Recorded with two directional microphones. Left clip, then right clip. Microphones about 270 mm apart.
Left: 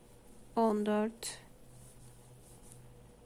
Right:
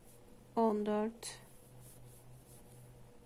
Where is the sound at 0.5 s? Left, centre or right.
Centre.